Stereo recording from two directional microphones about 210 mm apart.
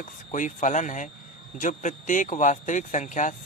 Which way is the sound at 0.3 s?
35° left (ahead or behind).